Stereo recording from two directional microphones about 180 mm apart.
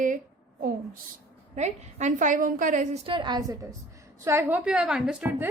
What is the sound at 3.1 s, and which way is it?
A woman's voice, 25° right (ahead or behind).